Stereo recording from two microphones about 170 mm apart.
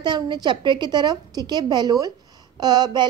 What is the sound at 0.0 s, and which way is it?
A woman's voice, 25° right (ahead or behind).